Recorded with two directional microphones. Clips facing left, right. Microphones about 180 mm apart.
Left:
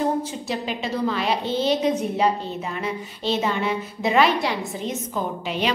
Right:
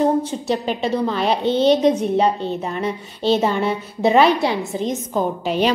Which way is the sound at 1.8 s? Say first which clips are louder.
Right 5 dB; 30° right (ahead or behind).